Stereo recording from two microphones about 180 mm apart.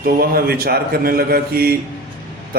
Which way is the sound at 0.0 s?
55° right (ahead or behind).